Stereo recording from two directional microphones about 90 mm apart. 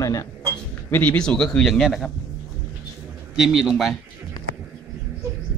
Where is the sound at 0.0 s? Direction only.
40° left (ahead or behind).